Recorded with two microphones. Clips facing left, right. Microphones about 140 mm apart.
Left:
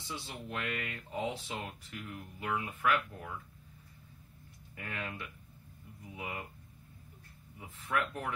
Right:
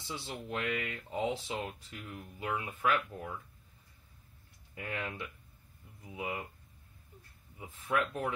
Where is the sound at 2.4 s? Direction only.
20° right (ahead or behind).